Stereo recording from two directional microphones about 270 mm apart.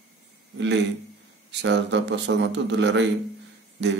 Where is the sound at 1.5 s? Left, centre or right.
Right.